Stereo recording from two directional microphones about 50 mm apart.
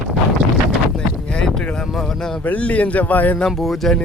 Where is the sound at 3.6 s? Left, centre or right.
Centre.